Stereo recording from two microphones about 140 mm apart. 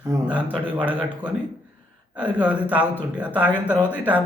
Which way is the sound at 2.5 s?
10° right (ahead or behind).